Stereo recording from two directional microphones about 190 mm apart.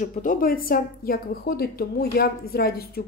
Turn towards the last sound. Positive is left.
turn(degrees=55)  # may be behind; listen again after turning